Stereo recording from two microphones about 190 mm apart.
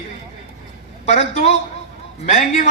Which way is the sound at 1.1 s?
35° left (ahead or behind).